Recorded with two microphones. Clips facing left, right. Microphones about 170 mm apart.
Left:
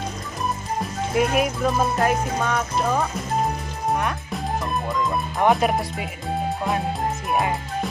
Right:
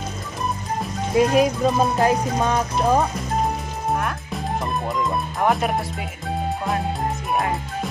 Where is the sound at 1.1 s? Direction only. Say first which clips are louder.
Right 4 dB; 25° right (ahead or behind).